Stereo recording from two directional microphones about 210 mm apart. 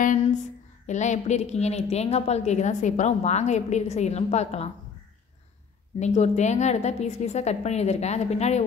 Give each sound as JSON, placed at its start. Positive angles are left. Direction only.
{"t": 0.0, "sound": "a sound", "side_deg": 35}
{"t": 0.8, "sound": "a woman's voice", "side_deg": 35}
{"t": 5.9, "sound": "a woman's voice", "side_deg": 35}